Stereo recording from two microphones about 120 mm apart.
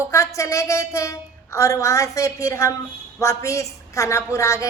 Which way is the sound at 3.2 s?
25° left (ahead or behind).